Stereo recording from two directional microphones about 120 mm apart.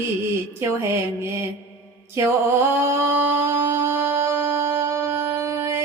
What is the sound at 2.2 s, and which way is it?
Mantra, 25° right (ahead or behind).